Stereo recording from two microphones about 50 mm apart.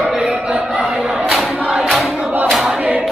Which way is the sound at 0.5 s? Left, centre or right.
Right.